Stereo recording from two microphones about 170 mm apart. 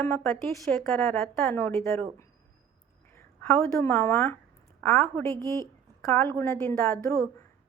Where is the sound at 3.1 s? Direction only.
15° left (ahead or behind).